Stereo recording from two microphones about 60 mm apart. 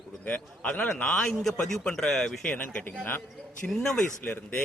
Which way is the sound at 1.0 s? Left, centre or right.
Centre.